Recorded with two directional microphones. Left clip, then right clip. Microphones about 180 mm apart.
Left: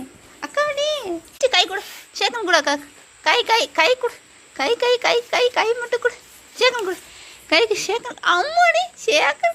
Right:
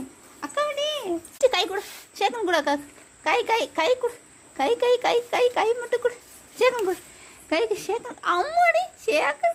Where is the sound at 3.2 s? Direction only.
10° right (ahead or behind).